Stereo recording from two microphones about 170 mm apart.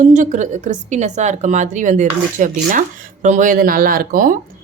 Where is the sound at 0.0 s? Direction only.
50° right (ahead or behind).